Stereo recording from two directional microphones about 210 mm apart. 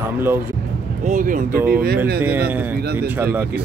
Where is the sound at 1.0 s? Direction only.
40° right (ahead or behind).